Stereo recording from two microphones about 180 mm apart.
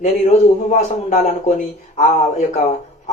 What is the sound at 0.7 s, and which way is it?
A man's voice, 40° left (ahead or behind).